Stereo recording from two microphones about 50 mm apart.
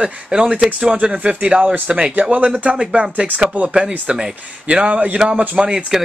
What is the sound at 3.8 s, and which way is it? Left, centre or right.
Speech, centre.